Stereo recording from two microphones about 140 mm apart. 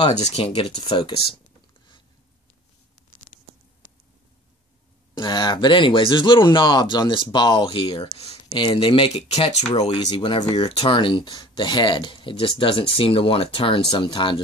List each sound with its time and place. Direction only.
0.2 s speech: 45° left (ahead or behind)
5.1 s speech: 30° left (ahead or behind)
9.3 s speech: 45° left (ahead or behind)